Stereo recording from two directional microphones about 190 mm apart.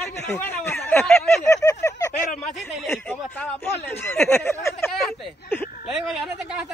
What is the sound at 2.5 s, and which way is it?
A man's voice, centre (ahead or behind).